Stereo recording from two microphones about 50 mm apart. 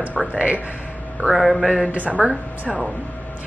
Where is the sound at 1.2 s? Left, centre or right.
Centre.